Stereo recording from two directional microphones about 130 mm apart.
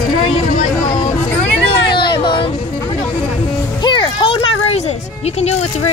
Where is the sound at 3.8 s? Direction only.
35° left (ahead or behind).